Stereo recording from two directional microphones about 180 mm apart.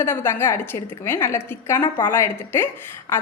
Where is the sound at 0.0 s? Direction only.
10° left (ahead or behind).